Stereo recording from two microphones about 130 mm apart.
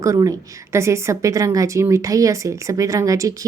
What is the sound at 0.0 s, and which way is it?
A woman's voice, 25° right (ahead or behind).